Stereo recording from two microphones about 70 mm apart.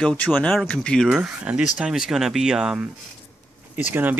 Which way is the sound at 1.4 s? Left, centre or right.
Centre.